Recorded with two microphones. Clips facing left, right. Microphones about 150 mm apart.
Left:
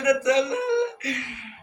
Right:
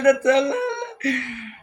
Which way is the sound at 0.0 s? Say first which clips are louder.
Right 4 dB; 55° right (ahead or behind).